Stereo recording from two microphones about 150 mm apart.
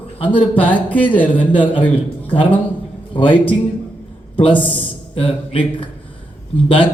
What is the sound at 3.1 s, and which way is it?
A man's voice, 35° left (ahead or behind).